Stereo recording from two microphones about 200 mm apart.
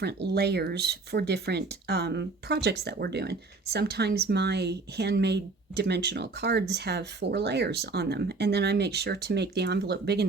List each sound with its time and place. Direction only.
0.0 s speech: 55° right (ahead or behind)